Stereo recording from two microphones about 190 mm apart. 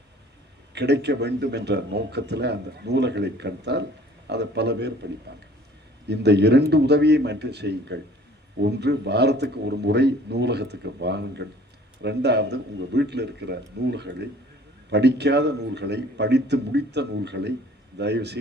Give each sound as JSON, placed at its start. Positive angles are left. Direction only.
{"t": 0.7, "sound": "speech", "side_deg": -65}
{"t": 6.1, "sound": "speech", "side_deg": -60}